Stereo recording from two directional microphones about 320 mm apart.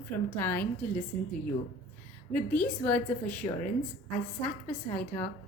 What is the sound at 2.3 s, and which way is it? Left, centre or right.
A woman's voice, centre.